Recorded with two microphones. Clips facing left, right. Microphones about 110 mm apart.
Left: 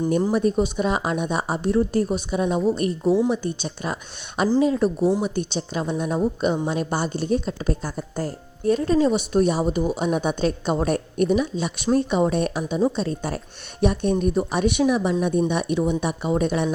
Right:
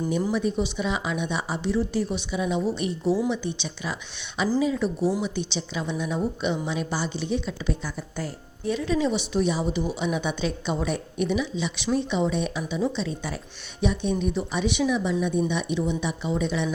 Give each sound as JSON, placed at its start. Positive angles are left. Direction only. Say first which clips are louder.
{"t": 0.3, "sound": "speech", "louder": "left 5 dB", "side_deg": 45}
{"t": 3.0, "sound": "speech", "louder": "left 4 dB", "side_deg": 25}
{"t": 3.2, "sound": "speech", "louder": "left 4 dB", "side_deg": 45}
{"t": 4.9, "sound": "speech", "louder": "left 4 dB", "side_deg": 25}
{"t": 5.2, "sound": "speech", "louder": "left 4 dB", "side_deg": 50}